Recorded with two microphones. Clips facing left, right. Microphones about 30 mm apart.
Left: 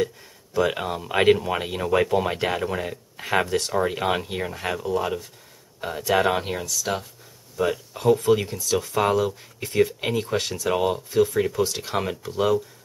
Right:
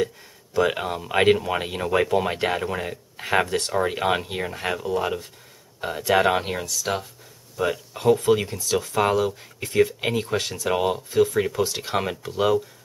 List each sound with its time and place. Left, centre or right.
0.6 s speech: centre
3.4 s speech: right
3.7 s speech: centre